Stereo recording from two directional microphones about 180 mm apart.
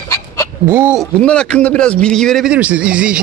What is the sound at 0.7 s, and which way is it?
Speech, 10° right (ahead or behind).